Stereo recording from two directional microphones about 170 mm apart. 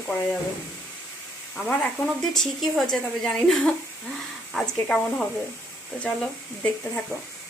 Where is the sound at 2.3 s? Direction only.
Centre (ahead or behind).